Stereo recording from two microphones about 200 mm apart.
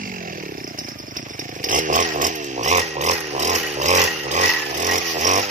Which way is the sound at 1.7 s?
40° right (ahead or behind).